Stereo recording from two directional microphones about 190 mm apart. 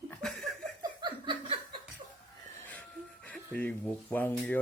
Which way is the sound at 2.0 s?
40° right (ahead or behind).